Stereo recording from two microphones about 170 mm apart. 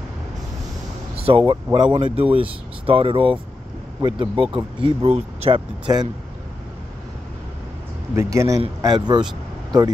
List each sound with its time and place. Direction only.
1.1 s vehicle: 35° right (ahead or behind)
1.5 s speech: 30° right (ahead or behind)
8.2 s speech: 20° right (ahead or behind)